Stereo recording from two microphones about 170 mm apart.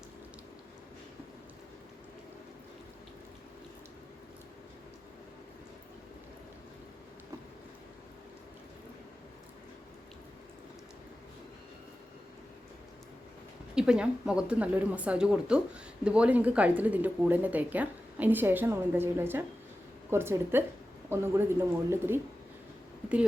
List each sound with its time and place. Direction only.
13.7 s speech: 5° right (ahead or behind)